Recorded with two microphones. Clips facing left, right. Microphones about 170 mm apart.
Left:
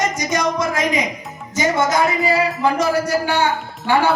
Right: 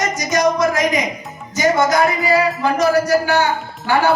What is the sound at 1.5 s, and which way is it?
Speech, 25° left (ahead or behind).